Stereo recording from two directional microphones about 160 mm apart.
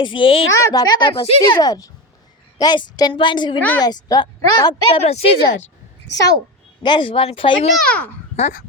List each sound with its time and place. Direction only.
0.0 s speech: 30° left (ahead or behind)
4.9 s speech: 40° left (ahead or behind)
6.1 s speech: 25° left (ahead or behind)
7.9 s a child's voice: 10° left (ahead or behind)
8.4 s speech: 45° left (ahead or behind)